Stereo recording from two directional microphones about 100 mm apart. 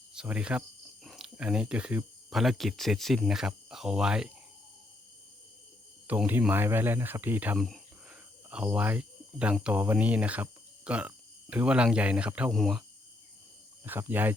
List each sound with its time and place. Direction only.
0.1 s speech: 10° right (ahead or behind)
2.3 s speech: centre (ahead or behind)
6.1 s speech: 15° right (ahead or behind)
7.6 s a sound: centre (ahead or behind)
8.4 s speech: 10° right (ahead or behind)
12.5 s speech: centre (ahead or behind)
14.1 s speech: 20° right (ahead or behind)